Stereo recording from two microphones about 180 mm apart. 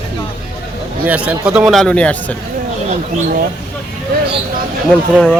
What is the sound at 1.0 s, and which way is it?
Speech, 10° right (ahead or behind).